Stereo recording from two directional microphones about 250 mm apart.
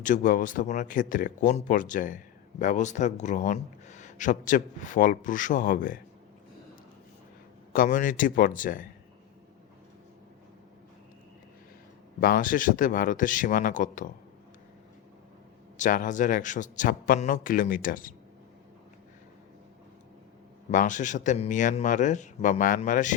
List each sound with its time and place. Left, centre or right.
0.0 s speech: left
7.7 s speech: left
12.2 s speech: left
15.8 s speech: left
20.7 s speech: left